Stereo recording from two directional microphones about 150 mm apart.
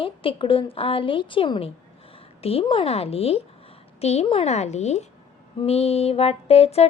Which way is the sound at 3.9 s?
45° left (ahead or behind).